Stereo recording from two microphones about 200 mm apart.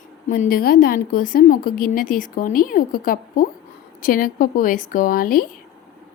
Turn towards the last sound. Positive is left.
turn(degrees=45)  # may be behind; listen again after turning